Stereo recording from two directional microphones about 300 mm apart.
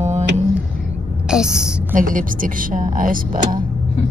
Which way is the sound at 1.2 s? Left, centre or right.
Centre.